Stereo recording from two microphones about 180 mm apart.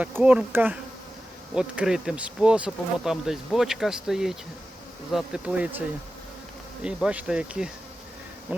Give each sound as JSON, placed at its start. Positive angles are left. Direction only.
{"t": 0.0, "sound": "insect", "side_deg": -10}
{"t": 1.5, "sound": "speech", "side_deg": -5}
{"t": 5.1, "sound": "insect", "side_deg": -5}
{"t": 6.8, "sound": "speech", "side_deg": -5}